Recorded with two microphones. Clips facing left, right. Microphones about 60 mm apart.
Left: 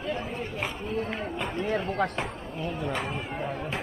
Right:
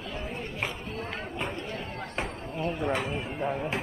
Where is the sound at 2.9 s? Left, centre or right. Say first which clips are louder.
Right 1 dB; centre.